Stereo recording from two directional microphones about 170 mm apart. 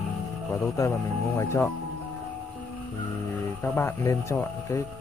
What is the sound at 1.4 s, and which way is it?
Speech, 15° left (ahead or behind).